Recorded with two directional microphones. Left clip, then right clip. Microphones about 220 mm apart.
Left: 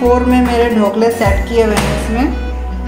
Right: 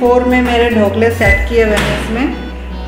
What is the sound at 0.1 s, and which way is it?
Speech, 15° left (ahead or behind).